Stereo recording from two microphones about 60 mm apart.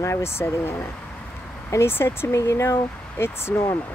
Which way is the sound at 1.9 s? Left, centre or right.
Left.